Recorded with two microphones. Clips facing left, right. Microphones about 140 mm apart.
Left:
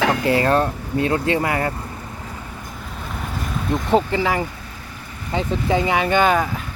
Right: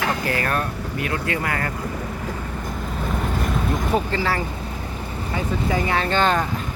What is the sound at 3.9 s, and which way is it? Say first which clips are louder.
Speech: left 6 dB; 15° left (ahead or behind).